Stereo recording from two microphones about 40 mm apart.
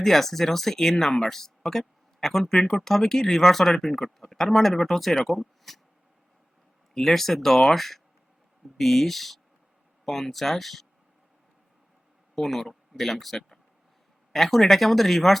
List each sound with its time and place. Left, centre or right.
0.0 s speech: centre
6.9 s speech: centre
12.3 s speech: centre